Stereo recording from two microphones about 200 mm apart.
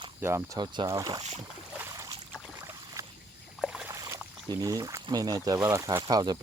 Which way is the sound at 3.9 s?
15° right (ahead or behind).